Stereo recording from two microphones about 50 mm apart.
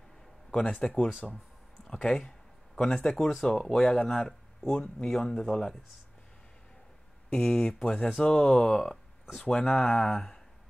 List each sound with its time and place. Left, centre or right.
0.5 s speech: centre
1.2 s speech: centre
1.9 s a sound: centre
3.1 s speech: centre
7.2 s speech: centre